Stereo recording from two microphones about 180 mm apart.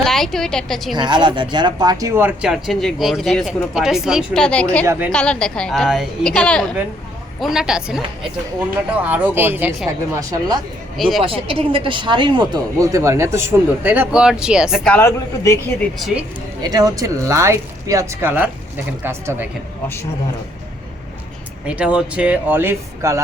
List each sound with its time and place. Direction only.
0.0 s a woman's voice: centre (ahead or behind)
0.9 s speech: 25° right (ahead or behind); by 4.9 s 5° left (ahead or behind)
4.9 s speech: 10° right (ahead or behind)
5.1 s speech: 5° left (ahead or behind); by 10.6 s 20° right (ahead or behind)
10.9 s speech: centre (ahead or behind)
11.2 s speech: 30° right (ahead or behind); by 14.8 s 5° right (ahead or behind)
14.8 s speech: 10° left (ahead or behind)
16.0 s speech: centre (ahead or behind)
16.6 s speech: 20° right (ahead or behind)
21.7 s speech: 5° right (ahead or behind)